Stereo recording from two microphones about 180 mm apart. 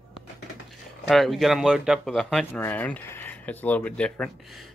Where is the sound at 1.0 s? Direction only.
Centre (ahead or behind).